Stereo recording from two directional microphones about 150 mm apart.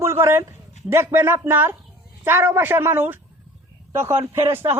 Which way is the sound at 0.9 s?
15° right (ahead or behind).